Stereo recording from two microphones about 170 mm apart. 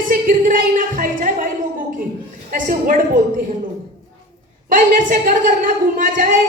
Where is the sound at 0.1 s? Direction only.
55° right (ahead or behind).